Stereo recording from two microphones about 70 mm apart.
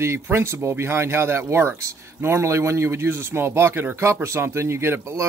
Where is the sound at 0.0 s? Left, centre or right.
Right.